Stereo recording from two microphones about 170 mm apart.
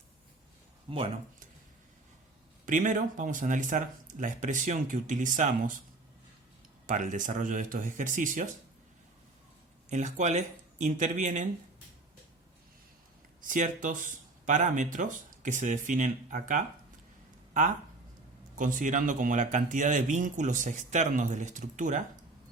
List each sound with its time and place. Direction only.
0.9 s speech: 30° right (ahead or behind)
2.6 s speech: 50° right (ahead or behind)
6.8 s speech: 50° right (ahead or behind)
9.9 s speech: 45° right (ahead or behind)
13.4 s speech: 50° right (ahead or behind)
18.5 s speech: 50° right (ahead or behind)